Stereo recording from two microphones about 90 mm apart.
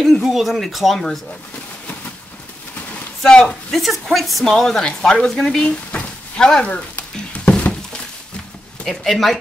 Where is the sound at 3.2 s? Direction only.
10° left (ahead or behind).